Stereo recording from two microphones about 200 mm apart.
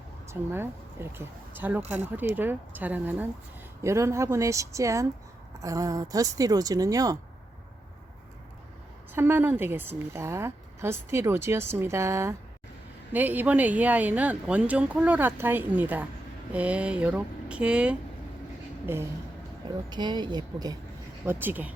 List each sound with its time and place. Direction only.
0.3 s a woman's voice: 10° right (ahead or behind)
9.1 s a woman's voice: 10° right (ahead or behind)
19.9 s a woman's voice: 20° right (ahead or behind)
21.2 s a woman's voice: 10° right (ahead or behind)